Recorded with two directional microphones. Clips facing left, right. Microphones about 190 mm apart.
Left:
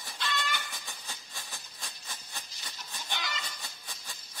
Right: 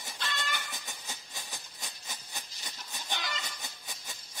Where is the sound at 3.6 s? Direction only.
20° right (ahead or behind).